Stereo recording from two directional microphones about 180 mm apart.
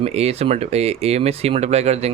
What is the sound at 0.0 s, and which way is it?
Speech, 35° right (ahead or behind).